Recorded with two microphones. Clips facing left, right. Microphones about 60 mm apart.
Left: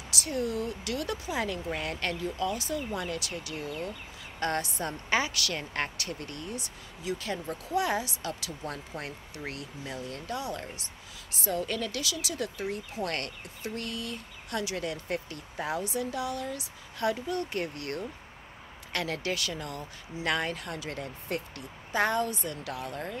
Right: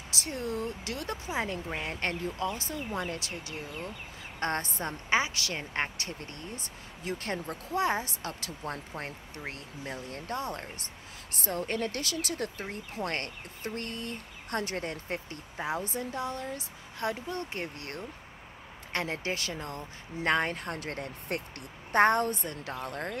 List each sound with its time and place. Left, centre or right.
0.1 s a woman's voice: right
13.6 s a woman's voice: right
15.0 s a woman's voice: right